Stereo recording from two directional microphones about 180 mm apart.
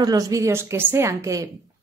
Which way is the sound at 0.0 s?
20° right (ahead or behind).